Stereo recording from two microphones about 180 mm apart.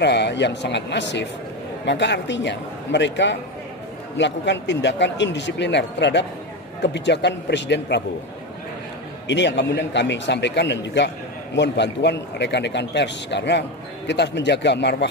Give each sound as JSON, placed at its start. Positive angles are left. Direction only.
{"t": 0.0, "sound": "a man's voice", "side_deg": 70}
{"t": 9.3, "sound": "a man's voice", "side_deg": 75}